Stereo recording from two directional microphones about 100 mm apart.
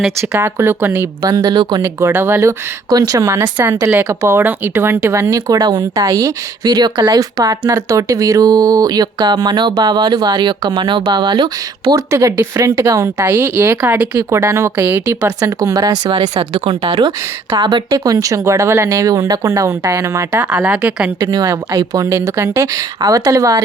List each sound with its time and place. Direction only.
0.2 s speech: 25° right (ahead or behind)
1.2 s speech: 40° right (ahead or behind)
1.8 s speech: 30° right (ahead or behind); by 11.4 s 50° right (ahead or behind)
11.9 s speech: 35° right (ahead or behind)
13.2 s a woman's voice: 15° right (ahead or behind)
14.2 s speech: 30° right (ahead or behind)
14.8 s speech: 20° right (ahead or behind)
15.4 s a woman's voice: 35° right (ahead or behind); by 17.8 s 55° right (ahead or behind)
17.9 s speech: 35° right (ahead or behind)
20.3 s a woman's voice: 15° right (ahead or behind)
21.2 s speech: 40° right (ahead or behind)